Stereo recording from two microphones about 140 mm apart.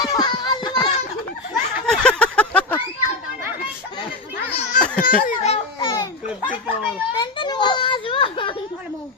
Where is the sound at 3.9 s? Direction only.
40° left (ahead or behind).